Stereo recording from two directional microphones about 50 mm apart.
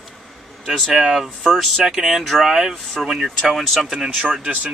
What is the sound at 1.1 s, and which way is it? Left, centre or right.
Speech, centre.